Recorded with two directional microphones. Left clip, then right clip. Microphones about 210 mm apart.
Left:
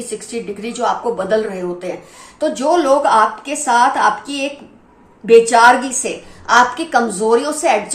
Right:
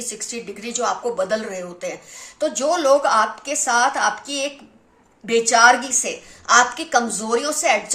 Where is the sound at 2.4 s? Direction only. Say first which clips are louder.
Left 4 dB; 45° right (ahead or behind).